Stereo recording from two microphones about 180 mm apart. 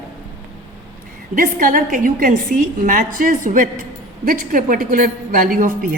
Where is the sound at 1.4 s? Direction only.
50° right (ahead or behind).